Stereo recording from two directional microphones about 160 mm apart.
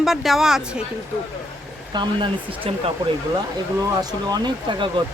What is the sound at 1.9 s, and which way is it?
Speech, 30° right (ahead or behind).